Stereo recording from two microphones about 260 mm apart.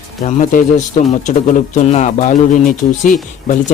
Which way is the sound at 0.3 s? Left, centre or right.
Left.